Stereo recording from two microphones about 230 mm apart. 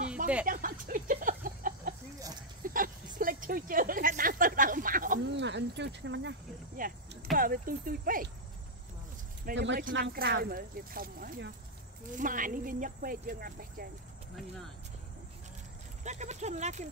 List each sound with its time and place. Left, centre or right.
0.5 s a sound: right
5.3 s speech: right
6.8 s speech: right
9.5 s speech: right
16.0 s speech: right